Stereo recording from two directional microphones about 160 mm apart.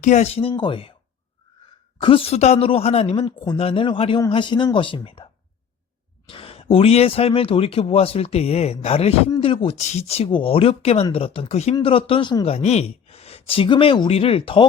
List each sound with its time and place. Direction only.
0.0 s speech: 45° left (ahead or behind)
2.0 s speech: 35° left (ahead or behind)
12.5 s speech: 40° left (ahead or behind)